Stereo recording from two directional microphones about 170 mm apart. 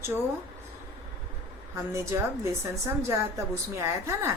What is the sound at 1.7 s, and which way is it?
A woman's voice, 15° right (ahead or behind).